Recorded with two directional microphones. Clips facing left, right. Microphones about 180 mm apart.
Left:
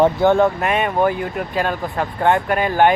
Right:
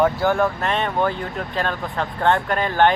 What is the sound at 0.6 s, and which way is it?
Speech, 10° left (ahead or behind).